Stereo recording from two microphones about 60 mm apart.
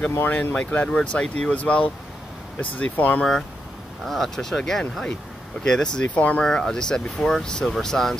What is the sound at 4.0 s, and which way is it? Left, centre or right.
Speech, centre.